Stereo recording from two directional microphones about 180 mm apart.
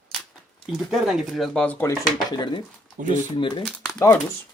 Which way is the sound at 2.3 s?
25° left (ahead or behind).